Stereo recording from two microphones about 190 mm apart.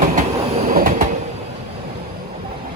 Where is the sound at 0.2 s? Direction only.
45° right (ahead or behind).